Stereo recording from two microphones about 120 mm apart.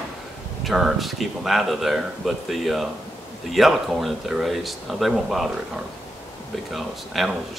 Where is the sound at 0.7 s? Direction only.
Centre (ahead or behind).